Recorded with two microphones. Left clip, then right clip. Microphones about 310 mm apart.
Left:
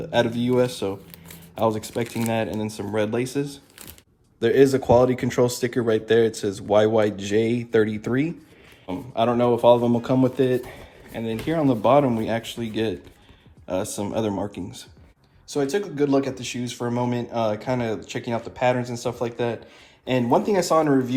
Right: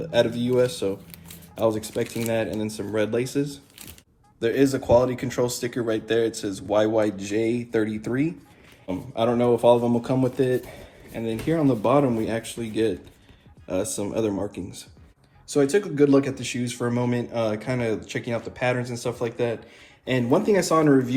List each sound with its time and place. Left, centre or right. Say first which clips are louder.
0.1 s speech: even; left
15.4 s speech: right 3 dB; centre